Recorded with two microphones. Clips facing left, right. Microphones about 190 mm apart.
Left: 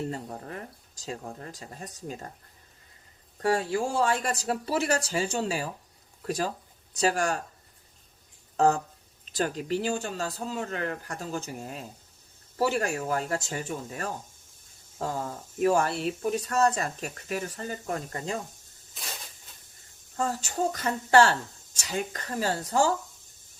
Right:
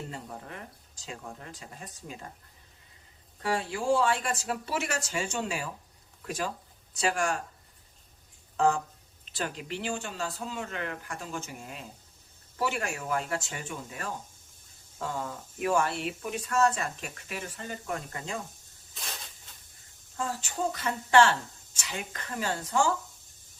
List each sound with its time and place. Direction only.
0.1 s speech: 40° left (ahead or behind)
3.4 s speech: 40° left (ahead or behind)
8.5 s a sound: 40° left (ahead or behind)
9.3 s speech: 40° left (ahead or behind)
20.1 s speech: 40° left (ahead or behind)